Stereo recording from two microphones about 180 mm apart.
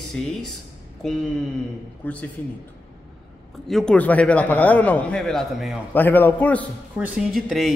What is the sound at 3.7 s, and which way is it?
A man's voice, 5° left (ahead or behind).